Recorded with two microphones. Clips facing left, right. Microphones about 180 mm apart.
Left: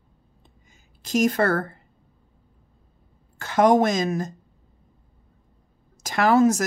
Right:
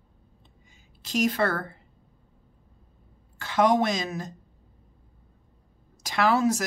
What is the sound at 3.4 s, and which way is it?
Speech, 45° left (ahead or behind).